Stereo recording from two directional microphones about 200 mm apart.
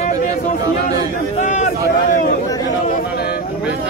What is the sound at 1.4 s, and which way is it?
Speech, 35° left (ahead or behind).